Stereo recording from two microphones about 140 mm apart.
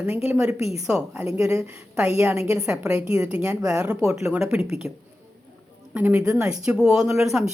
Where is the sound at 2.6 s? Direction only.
5° right (ahead or behind).